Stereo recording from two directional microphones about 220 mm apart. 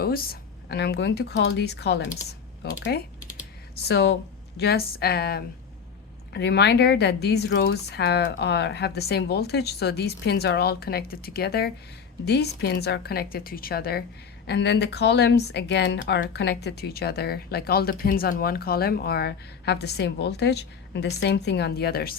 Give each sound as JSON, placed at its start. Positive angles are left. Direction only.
{"t": 0.0, "sound": "speech", "side_deg": 45}
{"t": 3.8, "sound": "speech", "side_deg": 50}